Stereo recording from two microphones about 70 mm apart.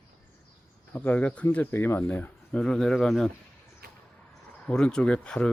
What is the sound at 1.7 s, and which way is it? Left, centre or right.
Speech, left.